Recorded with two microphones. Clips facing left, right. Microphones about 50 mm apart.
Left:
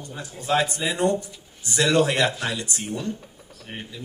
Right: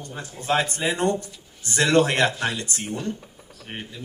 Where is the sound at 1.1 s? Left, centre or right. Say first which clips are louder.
Left 2 dB; centre.